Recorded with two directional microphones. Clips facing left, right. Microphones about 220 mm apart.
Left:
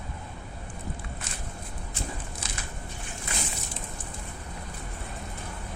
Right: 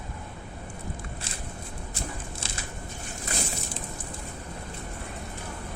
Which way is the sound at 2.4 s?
30° right (ahead or behind).